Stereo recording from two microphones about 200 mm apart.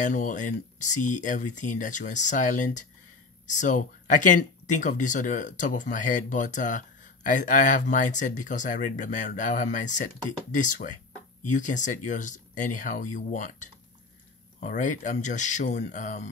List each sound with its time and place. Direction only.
0.0 s speech: 40° left (ahead or behind)